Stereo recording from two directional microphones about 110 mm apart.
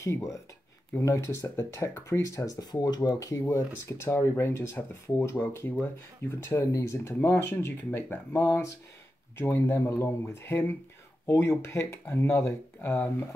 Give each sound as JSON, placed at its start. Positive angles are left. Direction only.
{"t": 0.0, "sound": "speech", "side_deg": 30}